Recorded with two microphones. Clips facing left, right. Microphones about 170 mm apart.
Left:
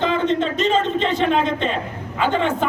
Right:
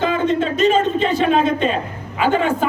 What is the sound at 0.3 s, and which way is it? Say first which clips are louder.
A man's voice: right 3 dB; 10° right (ahead or behind).